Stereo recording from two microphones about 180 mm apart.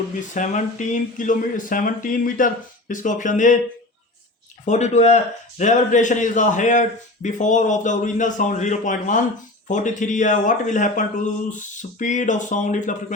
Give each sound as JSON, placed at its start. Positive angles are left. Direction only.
{"t": 0.3, "sound": "a man's voice", "side_deg": 45}
{"t": 4.6, "sound": "a man's voice", "side_deg": 40}